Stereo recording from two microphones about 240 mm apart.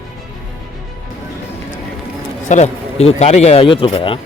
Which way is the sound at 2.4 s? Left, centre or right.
Left.